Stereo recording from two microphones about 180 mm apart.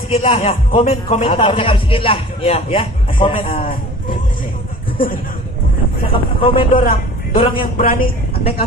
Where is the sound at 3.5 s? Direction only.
50° left (ahead or behind).